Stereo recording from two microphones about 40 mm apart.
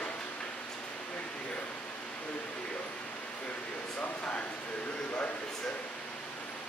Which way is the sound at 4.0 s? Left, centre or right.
Left.